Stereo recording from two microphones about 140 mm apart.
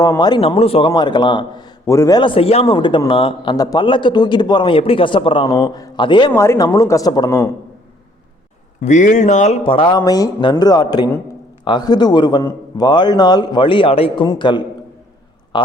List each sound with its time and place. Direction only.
0.0 s a man's voice: 30° left (ahead or behind)
0.9 s a man's voice: 30° left (ahead or behind)
5.5 s a woman's voice: 25° left (ahead or behind)
6.3 s a woman's voice: 20° left (ahead or behind)
8.8 s speech: 60° left (ahead or behind)
9.6 s a man's voice: 40° left (ahead or behind)
15.5 s a sound: 35° left (ahead or behind)